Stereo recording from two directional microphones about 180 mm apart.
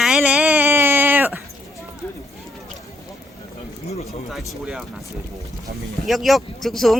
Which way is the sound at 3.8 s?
35° left (ahead or behind).